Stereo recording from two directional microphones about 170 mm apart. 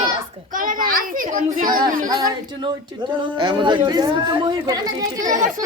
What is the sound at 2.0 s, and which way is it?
Speech, 25° right (ahead or behind).